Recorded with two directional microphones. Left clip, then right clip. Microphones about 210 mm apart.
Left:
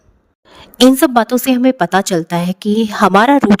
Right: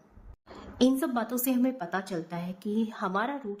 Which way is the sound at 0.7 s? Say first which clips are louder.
Left 17 dB; 50° left (ahead or behind).